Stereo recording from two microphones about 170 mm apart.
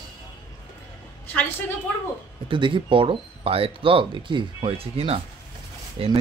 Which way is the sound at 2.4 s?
30° right (ahead or behind).